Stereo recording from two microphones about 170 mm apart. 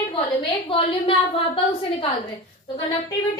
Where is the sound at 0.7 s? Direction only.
30° left (ahead or behind).